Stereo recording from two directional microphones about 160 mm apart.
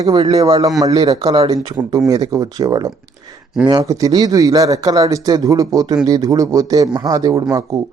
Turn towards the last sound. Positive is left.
turn(degrees=-20)  # may be behind; listen again after turning